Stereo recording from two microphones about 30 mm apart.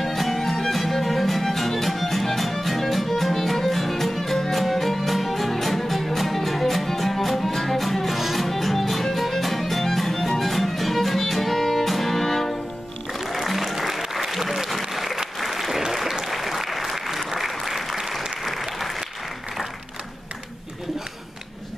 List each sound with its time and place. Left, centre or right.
0.0 s music: centre
14.2 s applause: centre